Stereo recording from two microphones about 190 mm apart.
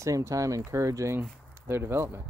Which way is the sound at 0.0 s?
15° right (ahead or behind).